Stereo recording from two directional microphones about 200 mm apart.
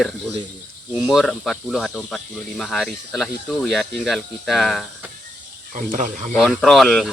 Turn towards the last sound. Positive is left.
turn(degrees=0)  # may be behind; listen again after turning